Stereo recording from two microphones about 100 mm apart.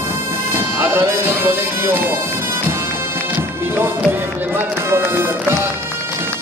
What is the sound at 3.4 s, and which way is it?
Music, 20° right (ahead or behind).